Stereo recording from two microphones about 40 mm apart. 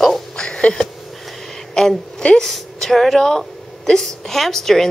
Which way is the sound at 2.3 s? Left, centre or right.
Centre.